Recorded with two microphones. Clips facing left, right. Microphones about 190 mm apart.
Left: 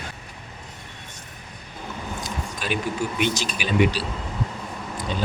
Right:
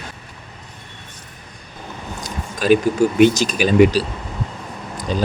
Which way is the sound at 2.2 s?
40° right (ahead or behind).